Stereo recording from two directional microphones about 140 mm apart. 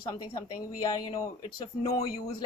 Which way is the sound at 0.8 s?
25° left (ahead or behind).